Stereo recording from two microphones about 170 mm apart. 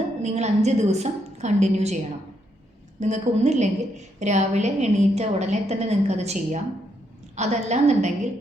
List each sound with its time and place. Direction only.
0.2 s a woman's voice: 40° right (ahead or behind)
3.0 s a woman's voice: 40° right (ahead or behind)